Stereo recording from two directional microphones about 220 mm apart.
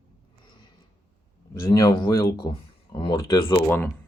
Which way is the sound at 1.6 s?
15° left (ahead or behind).